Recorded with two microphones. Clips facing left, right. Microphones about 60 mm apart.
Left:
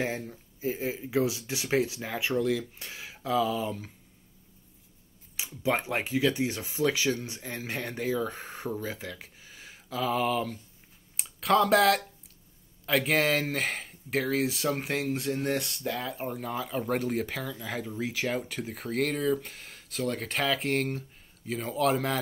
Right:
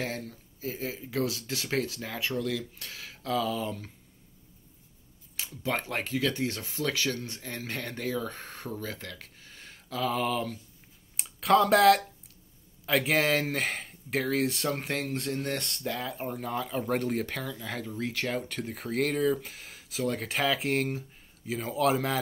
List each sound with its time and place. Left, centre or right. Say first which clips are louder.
0.0 s speech: left 3 dB; centre
5.4 s speech: left 3 dB; centre